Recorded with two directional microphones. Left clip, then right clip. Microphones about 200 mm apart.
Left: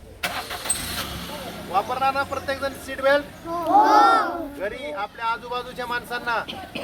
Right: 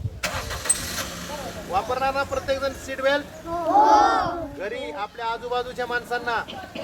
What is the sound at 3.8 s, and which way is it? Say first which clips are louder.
Speech: left 1 dB; 35° left (ahead or behind).